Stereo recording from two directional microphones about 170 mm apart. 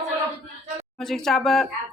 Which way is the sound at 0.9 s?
Centre (ahead or behind).